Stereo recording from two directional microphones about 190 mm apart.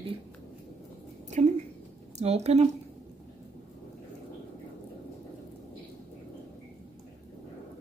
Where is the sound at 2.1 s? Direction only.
35° right (ahead or behind).